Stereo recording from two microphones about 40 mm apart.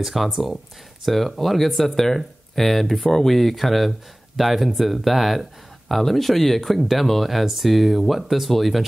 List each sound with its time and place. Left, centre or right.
0.0 s speech: centre